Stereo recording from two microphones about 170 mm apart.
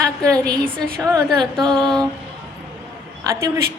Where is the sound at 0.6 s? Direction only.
5° left (ahead or behind).